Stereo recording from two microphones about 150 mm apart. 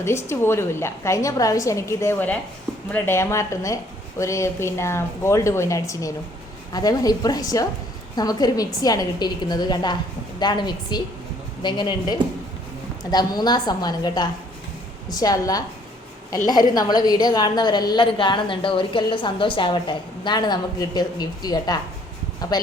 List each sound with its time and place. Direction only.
0.0 s a woman's voice: 15° left (ahead or behind)